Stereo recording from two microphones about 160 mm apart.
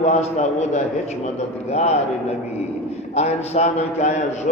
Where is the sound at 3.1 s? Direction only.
45° left (ahead or behind).